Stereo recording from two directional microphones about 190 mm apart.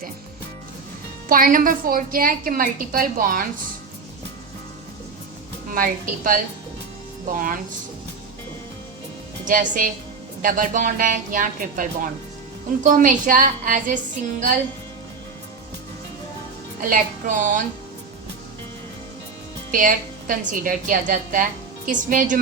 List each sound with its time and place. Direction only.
1.3 s a woman's voice: 45° right (ahead or behind)
5.7 s a woman's voice: 45° right (ahead or behind)
9.5 s a woman's voice: 45° right (ahead or behind)
16.9 s a woman's voice: 45° right (ahead or behind)
19.7 s a woman's voice: 45° right (ahead or behind)